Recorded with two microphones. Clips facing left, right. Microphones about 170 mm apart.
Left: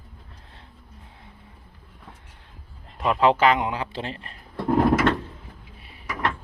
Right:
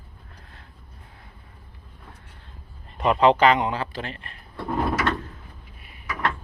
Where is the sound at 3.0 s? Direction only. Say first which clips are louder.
Right 2 dB; centre (ahead or behind).